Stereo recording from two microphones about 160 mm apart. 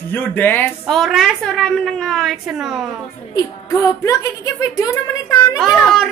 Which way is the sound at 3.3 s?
20° left (ahead or behind).